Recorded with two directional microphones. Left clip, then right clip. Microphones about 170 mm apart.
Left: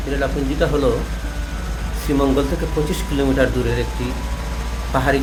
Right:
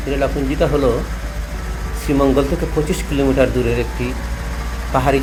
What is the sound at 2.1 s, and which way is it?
Speech, 10° right (ahead or behind).